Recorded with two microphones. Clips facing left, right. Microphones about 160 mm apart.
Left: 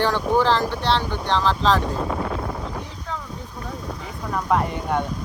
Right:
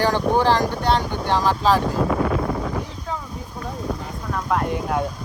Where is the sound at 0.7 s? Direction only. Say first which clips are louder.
Right 2 dB; 45° right (ahead or behind).